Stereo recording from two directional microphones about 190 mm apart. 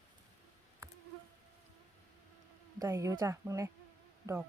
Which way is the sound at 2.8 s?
15° right (ahead or behind).